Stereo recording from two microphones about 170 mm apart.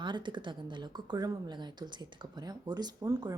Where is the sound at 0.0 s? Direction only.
25° right (ahead or behind).